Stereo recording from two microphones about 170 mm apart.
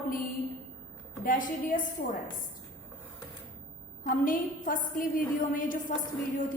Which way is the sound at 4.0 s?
55° left (ahead or behind).